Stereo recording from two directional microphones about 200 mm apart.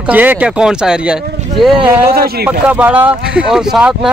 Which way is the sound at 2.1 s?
50° right (ahead or behind).